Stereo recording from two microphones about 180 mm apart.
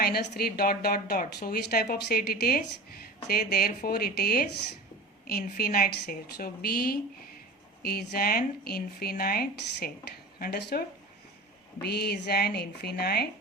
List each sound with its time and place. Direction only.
0.0 s a woman's voice: 60° left (ahead or behind)